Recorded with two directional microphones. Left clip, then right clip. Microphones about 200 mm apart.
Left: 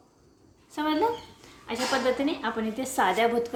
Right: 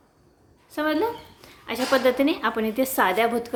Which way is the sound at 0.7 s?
25° right (ahead or behind).